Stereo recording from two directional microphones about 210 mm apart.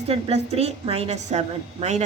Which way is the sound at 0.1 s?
30° right (ahead or behind).